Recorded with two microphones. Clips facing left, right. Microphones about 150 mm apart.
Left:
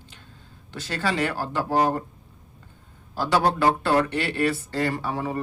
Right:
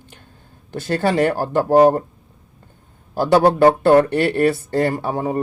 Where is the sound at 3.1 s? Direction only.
50° right (ahead or behind).